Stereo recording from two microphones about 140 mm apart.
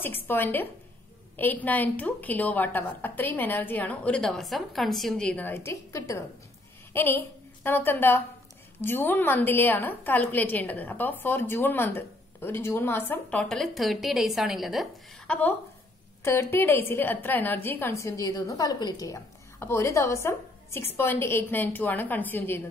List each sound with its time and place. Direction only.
0.0 s a woman's voice: 15° left (ahead or behind); by 15.3 s centre (ahead or behind)
16.3 s a woman's voice: 15° left (ahead or behind)